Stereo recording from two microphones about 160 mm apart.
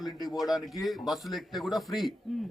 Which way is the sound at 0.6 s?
Centre (ahead or behind).